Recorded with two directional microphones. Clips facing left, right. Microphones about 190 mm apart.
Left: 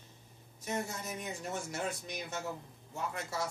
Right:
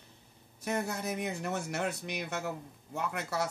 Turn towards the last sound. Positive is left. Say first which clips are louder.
# right 4 dB
turn(degrees=-65)  # may be behind; listen again after turning